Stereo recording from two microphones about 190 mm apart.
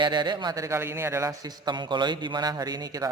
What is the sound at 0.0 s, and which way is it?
A man's voice, 25° right (ahead or behind).